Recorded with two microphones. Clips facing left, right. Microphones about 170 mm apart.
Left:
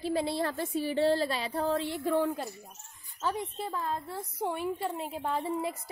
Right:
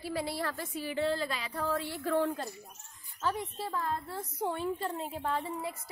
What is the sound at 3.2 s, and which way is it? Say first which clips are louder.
Speech: left 1 dB; 20° left (ahead or behind).